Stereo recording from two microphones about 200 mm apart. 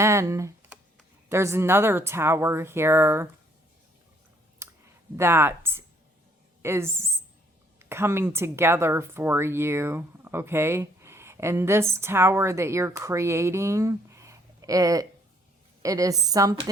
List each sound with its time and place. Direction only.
0.0 s computer keyboard: 15° right (ahead or behind)
1.3 s speech: 15° right (ahead or behind)
4.6 s clicking: 15° right (ahead or behind)
5.1 s speech: 10° right (ahead or behind)